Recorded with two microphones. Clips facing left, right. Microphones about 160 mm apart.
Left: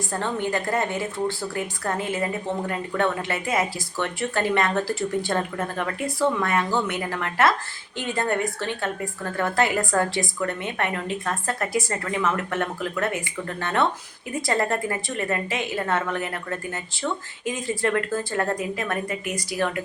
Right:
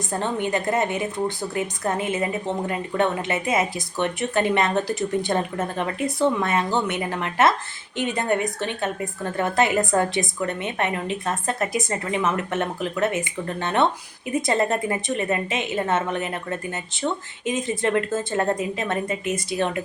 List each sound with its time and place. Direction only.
0.1 s a woman's voice: 20° right (ahead or behind)